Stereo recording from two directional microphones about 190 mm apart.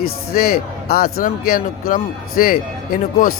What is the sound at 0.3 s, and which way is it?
Speech, 50° left (ahead or behind).